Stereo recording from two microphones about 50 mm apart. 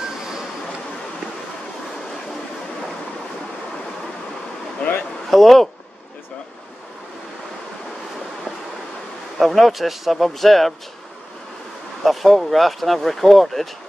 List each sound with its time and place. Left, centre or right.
4.7 s a sound: left
5.3 s speech: centre
9.4 s speech: centre
12.0 s speech: centre